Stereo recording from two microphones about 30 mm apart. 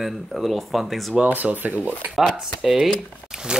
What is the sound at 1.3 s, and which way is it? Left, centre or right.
Speech, right.